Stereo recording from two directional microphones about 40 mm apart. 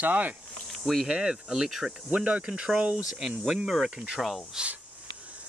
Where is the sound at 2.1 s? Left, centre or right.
Right.